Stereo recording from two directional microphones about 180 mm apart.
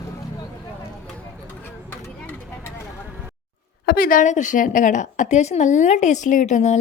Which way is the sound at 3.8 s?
55° left (ahead or behind).